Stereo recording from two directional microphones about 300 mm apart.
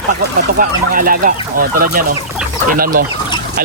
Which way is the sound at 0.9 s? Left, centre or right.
Right.